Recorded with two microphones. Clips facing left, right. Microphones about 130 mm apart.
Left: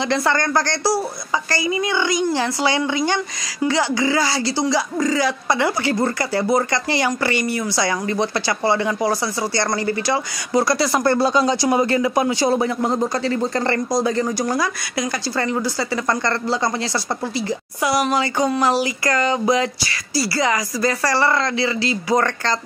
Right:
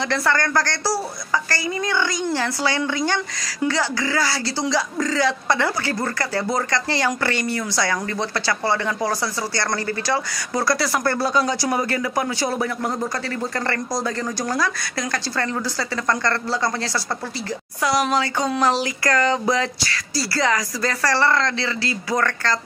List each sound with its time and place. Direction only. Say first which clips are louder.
0.1 s speech: left 2 dB; 20° left (ahead or behind)